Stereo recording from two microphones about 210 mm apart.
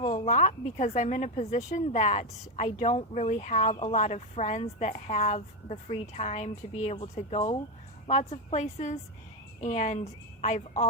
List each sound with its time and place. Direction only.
0.0 s a woman's voice: 35° left (ahead or behind)